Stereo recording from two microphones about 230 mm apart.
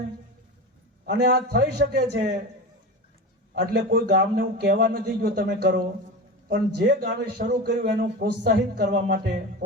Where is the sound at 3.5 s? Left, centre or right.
Right.